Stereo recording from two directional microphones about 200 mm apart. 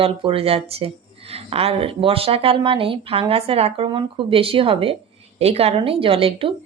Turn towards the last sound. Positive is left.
turn(degrees=-25)  # may be behind; listen again after turning